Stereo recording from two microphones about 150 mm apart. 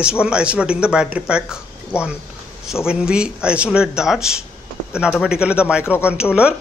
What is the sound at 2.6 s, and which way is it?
A man's voice, 5° right (ahead or behind).